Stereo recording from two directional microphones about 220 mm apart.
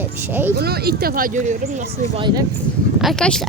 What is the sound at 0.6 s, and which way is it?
Speech, 45° right (ahead or behind).